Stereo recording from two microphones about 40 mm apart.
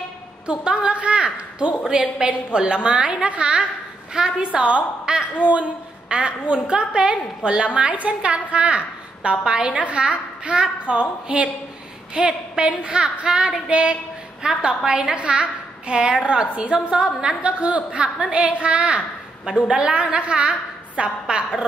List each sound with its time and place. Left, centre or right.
0.5 s a woman's voice: right
4.1 s a woman's voice: right
4.5 s a woman's voice: right